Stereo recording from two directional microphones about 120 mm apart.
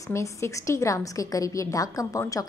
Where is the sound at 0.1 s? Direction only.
25° left (ahead or behind).